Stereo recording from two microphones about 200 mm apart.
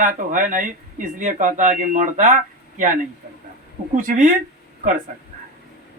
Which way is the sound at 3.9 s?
40° right (ahead or behind).